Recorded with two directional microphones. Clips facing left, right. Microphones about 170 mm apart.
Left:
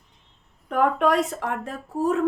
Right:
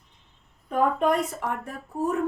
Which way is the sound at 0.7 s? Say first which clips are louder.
Left 2 dB; 80° left.